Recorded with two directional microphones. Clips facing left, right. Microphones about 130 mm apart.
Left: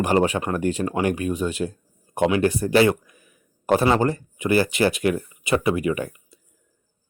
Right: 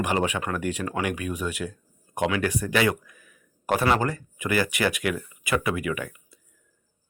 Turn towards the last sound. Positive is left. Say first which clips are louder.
# left 5 dB
turn(degrees=30)  # may be behind; listen again after turning